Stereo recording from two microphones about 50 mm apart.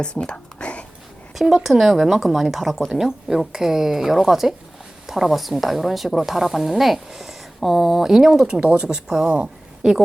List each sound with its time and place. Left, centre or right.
0.0 s whispering: centre
1.4 s speech: centre